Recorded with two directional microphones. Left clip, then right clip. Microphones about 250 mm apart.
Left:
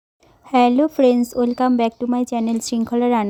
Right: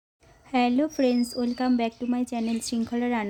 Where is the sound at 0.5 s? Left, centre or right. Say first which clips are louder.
Left 9 dB; left.